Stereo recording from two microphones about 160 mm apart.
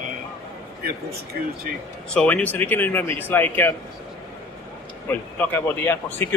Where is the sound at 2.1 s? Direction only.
10° left (ahead or behind).